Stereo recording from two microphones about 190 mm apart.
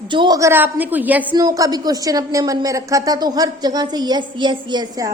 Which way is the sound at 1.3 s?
20° right (ahead or behind).